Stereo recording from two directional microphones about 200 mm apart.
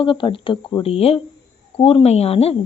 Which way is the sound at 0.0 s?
25° left (ahead or behind).